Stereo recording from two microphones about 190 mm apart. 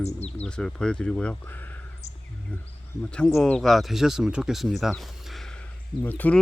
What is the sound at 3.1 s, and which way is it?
Speech, centre (ahead or behind).